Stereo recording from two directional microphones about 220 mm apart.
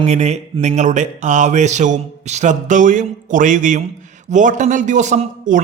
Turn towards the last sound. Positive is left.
turn(degrees=-35)  # may be behind; listen again after turning